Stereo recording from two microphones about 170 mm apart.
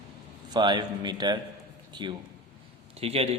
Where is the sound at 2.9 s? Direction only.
35° right (ahead or behind).